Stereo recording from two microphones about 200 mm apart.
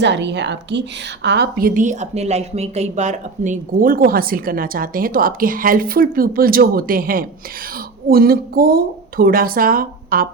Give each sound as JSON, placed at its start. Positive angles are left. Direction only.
{"t": 0.0, "sound": "a woman's voice", "side_deg": -60}